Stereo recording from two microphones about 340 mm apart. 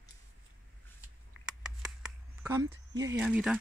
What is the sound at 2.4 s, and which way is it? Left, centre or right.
Speech, centre.